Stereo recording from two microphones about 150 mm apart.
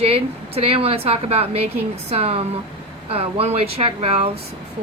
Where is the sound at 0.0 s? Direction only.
40° right (ahead or behind).